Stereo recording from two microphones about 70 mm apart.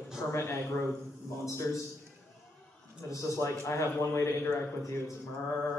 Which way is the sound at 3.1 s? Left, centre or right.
Left.